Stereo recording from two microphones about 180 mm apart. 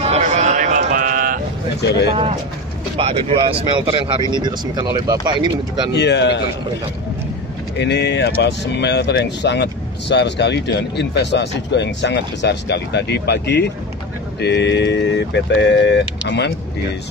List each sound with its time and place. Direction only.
0.0 s a sound: 40° right (ahead or behind)
1.8 s speech: 70° left (ahead or behind)
3.0 s speech: 35° right (ahead or behind)
5.9 s speech: 75° left (ahead or behind)
7.8 s speech: 75° left (ahead or behind)